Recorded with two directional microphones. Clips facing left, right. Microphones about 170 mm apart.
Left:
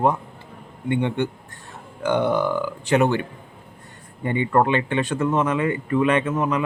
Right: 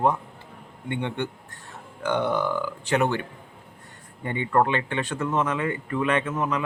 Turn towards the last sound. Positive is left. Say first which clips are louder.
# left 4 dB
turn(degrees=15)  # may be behind; listen again after turning